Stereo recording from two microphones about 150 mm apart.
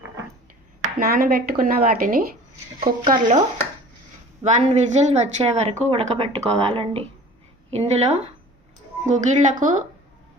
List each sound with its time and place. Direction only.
0.8 s speech: 75° right (ahead or behind)
3.1 s a woman's voice: 55° right (ahead or behind)
4.4 s a woman's voice: 50° right (ahead or behind)